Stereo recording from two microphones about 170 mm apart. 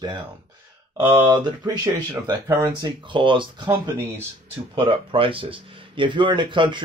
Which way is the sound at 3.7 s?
15° right (ahead or behind).